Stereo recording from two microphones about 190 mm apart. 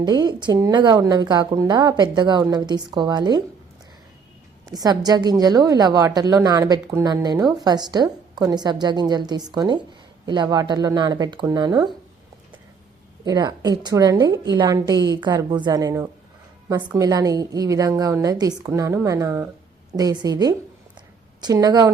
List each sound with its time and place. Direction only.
0.0 s speech: 20° right (ahead or behind)
4.7 s speech: 20° right (ahead or behind)
13.2 s a woman's voice: 20° right (ahead or behind)